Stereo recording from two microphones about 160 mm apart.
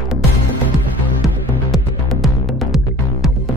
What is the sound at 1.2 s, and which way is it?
Music, centre (ahead or behind).